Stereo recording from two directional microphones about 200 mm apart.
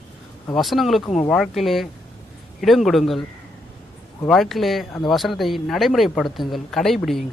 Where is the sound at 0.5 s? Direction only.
Centre (ahead or behind).